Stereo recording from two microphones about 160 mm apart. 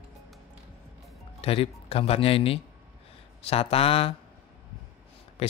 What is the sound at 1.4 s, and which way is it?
Speech, 35° left (ahead or behind).